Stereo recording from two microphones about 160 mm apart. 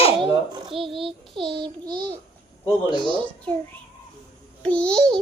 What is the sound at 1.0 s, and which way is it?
Child singing, centre (ahead or behind).